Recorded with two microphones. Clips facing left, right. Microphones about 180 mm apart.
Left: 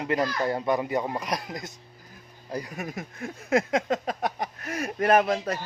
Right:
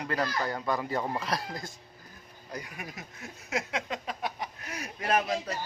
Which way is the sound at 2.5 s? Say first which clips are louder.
Left 8 dB; 40° left (ahead or behind).